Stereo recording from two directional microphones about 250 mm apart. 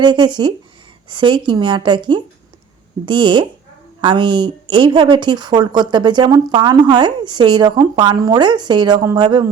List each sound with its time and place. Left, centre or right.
0.0 s speech: centre